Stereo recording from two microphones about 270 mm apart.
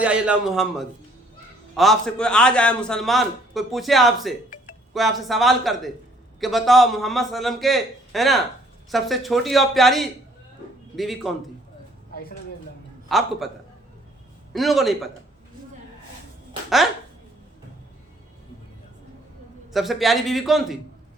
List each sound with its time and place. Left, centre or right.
0.0 s a man's voice: centre
12.1 s a sound: left
13.1 s a man's voice: centre
14.5 s a man's voice: centre
16.6 s speech: centre
19.7 s a man's voice: centre